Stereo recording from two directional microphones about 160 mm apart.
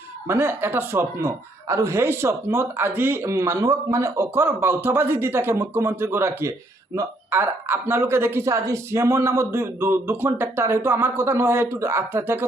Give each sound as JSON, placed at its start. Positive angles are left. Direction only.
{"t": 0.3, "sound": "a man's voice", "side_deg": -15}